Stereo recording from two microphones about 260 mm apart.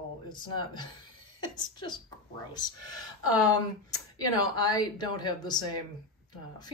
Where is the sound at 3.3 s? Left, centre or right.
Centre.